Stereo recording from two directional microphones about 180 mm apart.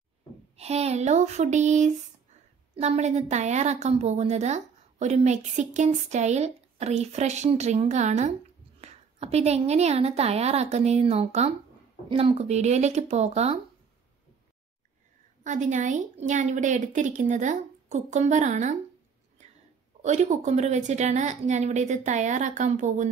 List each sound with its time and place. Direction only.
0.6 s a woman's voice: 35° right (ahead or behind)
15.4 s a woman's voice: 45° right (ahead or behind)
20.0 s a woman's voice: 40° right (ahead or behind)